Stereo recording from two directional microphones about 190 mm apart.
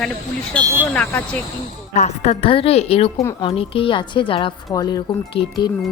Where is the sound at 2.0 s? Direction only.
35° left (ahead or behind).